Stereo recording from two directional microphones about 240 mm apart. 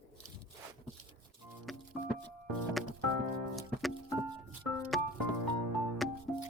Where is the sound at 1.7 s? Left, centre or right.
Centre.